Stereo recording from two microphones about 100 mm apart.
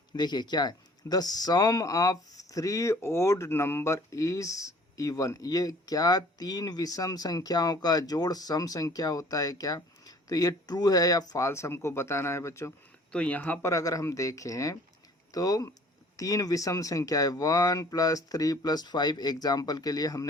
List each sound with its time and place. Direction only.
0.2 s speech: 45° left (ahead or behind); by 12.7 s 30° left (ahead or behind)
13.1 s speech: 15° left (ahead or behind)
13.7 s speech: 35° left (ahead or behind)